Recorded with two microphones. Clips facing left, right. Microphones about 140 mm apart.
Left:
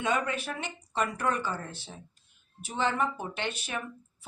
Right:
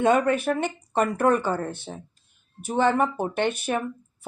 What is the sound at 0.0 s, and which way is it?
Speech, 50° right (ahead or behind).